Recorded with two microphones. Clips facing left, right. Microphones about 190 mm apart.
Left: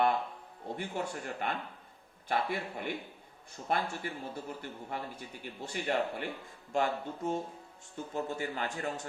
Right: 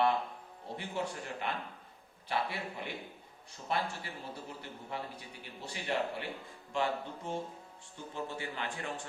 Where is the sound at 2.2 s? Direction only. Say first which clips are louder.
Left 3 dB; 50° left (ahead or behind).